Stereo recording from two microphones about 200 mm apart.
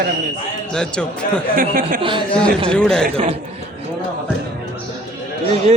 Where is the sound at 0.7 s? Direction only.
5° left (ahead or behind).